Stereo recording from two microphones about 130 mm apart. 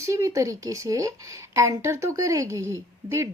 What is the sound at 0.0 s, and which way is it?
A woman's voice, 25° right (ahead or behind).